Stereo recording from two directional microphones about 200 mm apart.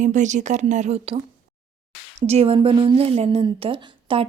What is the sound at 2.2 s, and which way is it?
A woman's voice, 30° right (ahead or behind).